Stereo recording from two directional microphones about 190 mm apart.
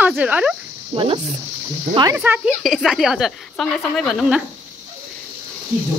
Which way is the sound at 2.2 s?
5° right (ahead or behind).